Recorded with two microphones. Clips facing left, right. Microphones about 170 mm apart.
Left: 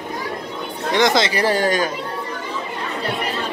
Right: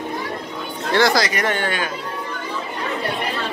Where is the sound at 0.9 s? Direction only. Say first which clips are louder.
Left 1 dB; 20° left (ahead or behind); by 1.8 s 40° left (ahead or behind).